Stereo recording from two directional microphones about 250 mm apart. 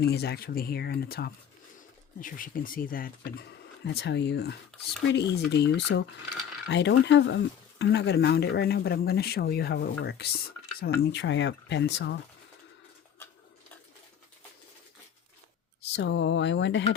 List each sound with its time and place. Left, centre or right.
0.0 s speech: left
16.0 s speech: left